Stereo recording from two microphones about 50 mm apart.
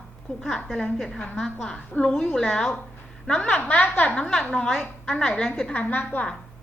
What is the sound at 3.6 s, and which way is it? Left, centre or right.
Speech, left.